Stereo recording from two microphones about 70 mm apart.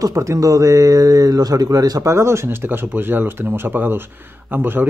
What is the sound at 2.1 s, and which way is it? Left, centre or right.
Speech, right.